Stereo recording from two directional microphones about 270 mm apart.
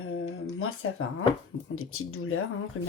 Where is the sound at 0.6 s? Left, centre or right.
Left.